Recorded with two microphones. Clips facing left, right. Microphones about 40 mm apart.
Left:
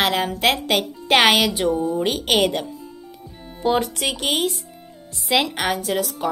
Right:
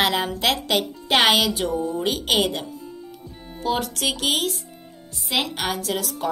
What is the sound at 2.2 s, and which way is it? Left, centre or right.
Speech, left.